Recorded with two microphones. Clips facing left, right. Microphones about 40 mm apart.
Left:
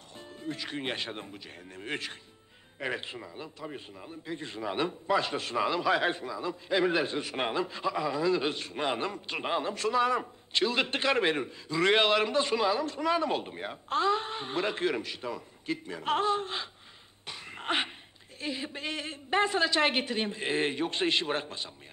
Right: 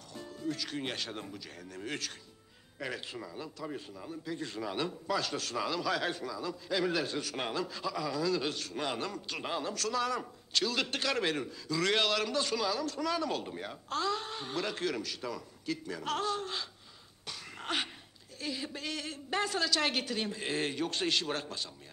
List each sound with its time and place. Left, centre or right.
0.1 s a man's voice: left
17.3 s a sound: left
18.4 s a man's voice: left